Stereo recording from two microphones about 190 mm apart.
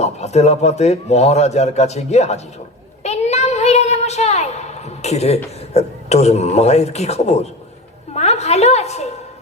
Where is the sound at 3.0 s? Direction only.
35° left (ahead or behind).